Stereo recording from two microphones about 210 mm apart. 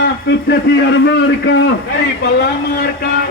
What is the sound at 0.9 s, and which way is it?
Speech, 55° left (ahead or behind).